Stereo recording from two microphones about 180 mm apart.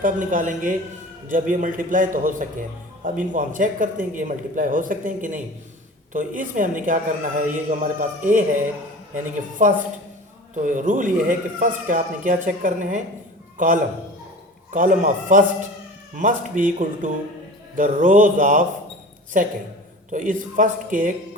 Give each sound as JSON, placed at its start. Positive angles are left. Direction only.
{"t": 0.0, "sound": "a man's voice", "side_deg": -45}
{"t": 14.7, "sound": "a man's voice", "side_deg": -45}